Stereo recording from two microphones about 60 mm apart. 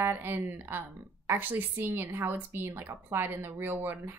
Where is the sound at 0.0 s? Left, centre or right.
Right.